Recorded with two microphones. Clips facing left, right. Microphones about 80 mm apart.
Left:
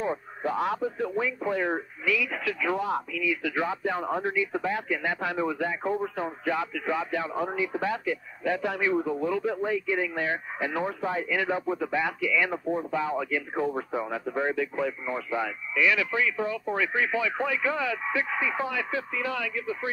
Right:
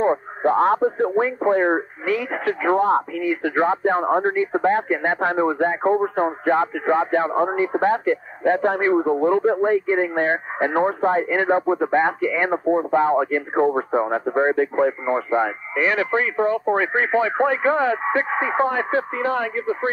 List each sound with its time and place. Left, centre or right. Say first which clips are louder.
0.0 s speech: right 10 dB; right